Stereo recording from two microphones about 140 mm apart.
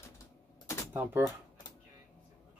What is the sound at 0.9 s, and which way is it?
Speech, 20° right (ahead or behind).